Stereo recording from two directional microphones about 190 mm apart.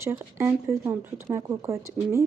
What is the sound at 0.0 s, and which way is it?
Speech, 15° right (ahead or behind).